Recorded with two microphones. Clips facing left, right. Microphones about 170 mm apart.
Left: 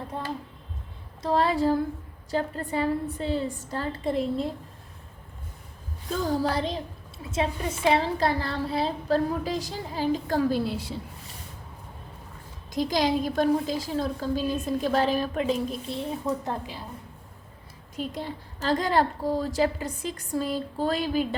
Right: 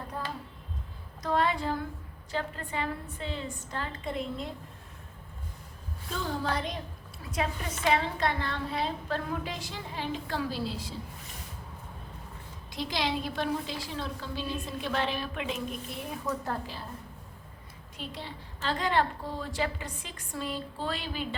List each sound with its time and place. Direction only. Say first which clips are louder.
1.2 s a woman's voice: left 5 dB; 30° left (ahead or behind)
6.1 s a woman's voice: left 6 dB; 40° left (ahead or behind)
7.9 s a woman's voice: left 4 dB; 30° left (ahead or behind); by 10.9 s 60° left (ahead or behind)
12.7 s a woman's voice: left 7 dB; 45° left (ahead or behind); by 16.8 s 20° left (ahead or behind)
17.9 s a woman's voice: left 8 dB; 45° left (ahead or behind)